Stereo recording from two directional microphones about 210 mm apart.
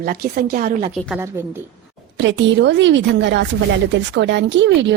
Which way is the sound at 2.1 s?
60° right (ahead or behind).